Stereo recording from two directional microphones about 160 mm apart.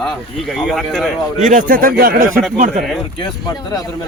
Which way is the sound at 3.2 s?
25° left (ahead or behind).